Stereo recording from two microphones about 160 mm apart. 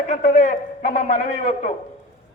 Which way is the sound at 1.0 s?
40° left (ahead or behind).